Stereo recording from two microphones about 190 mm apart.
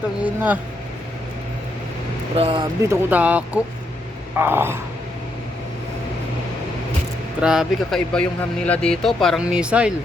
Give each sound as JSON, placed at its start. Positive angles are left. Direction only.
{"t": 0.2, "sound": "speech", "side_deg": -10}
{"t": 2.3, "sound": "speech", "side_deg": -30}
{"t": 2.9, "sound": "speech", "side_deg": -10}
{"t": 7.4, "sound": "speech", "side_deg": -5}